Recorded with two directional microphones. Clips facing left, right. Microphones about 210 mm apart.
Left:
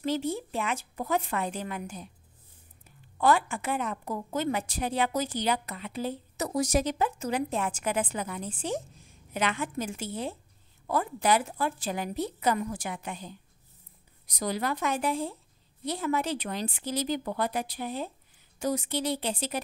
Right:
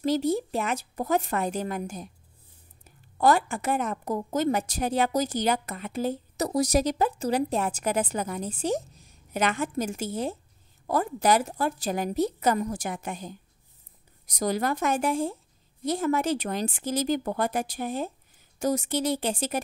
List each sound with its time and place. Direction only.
0.0 s a woman's voice: 40° right (ahead or behind)